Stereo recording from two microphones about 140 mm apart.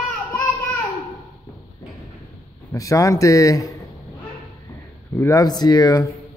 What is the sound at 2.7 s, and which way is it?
Speech, 20° left (ahead or behind).